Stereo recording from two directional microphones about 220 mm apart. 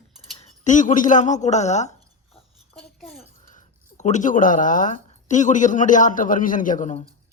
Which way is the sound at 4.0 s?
35° left (ahead or behind).